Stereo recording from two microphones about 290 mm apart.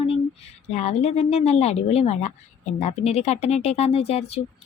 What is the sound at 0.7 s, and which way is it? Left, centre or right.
Speech, left.